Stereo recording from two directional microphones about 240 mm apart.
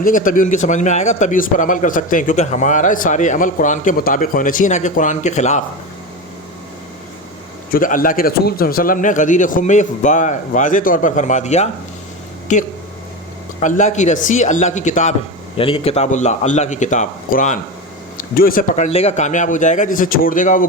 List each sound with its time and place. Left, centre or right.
0.0 s speech: left
7.7 s a man's voice: left